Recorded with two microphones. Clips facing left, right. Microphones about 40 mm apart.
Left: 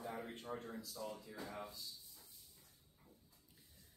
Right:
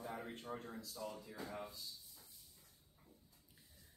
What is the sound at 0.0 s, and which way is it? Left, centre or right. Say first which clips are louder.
Speech: even; centre.